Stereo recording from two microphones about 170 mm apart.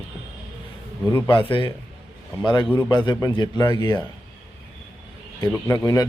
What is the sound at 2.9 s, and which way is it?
Speech, 25° left (ahead or behind).